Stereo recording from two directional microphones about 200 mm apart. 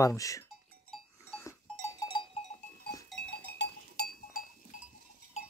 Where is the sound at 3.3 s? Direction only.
55° left (ahead or behind).